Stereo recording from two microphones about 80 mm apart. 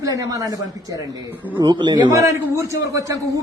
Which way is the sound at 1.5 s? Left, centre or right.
Right.